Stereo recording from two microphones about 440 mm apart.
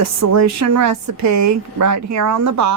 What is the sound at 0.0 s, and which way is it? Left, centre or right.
A woman's voice, right.